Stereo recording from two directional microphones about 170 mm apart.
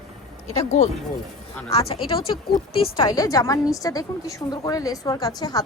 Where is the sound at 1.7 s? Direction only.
35° left (ahead or behind).